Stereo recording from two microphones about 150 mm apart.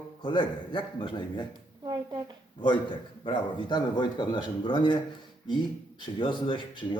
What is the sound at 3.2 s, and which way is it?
Speech, 35° left (ahead or behind).